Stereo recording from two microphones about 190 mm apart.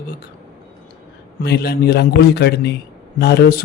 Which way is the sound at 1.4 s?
60° left (ahead or behind).